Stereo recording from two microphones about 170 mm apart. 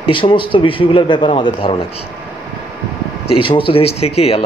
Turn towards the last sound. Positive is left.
turn(degrees=35)  # may be behind; listen again after turning